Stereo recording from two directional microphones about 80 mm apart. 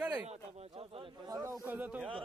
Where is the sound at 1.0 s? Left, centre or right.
Right.